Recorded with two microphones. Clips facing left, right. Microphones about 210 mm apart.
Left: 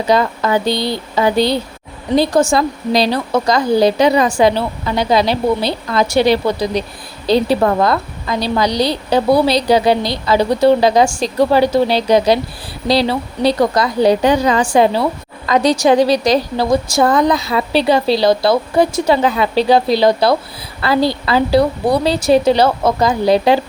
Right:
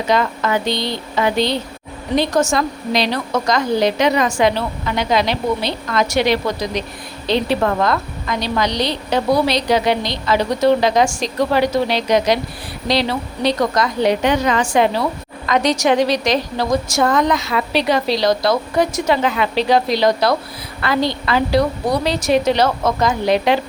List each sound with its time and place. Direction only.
0.1 s a woman's voice: 35° left (ahead or behind)